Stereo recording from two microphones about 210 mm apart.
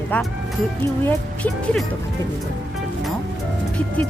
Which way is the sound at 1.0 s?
5° left (ahead or behind).